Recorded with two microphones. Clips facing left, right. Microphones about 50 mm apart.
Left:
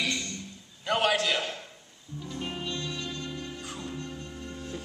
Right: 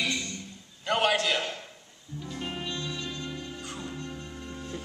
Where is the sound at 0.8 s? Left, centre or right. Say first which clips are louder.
Even; centre.